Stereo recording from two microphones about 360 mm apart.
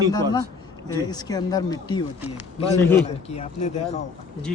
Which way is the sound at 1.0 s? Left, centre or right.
Centre.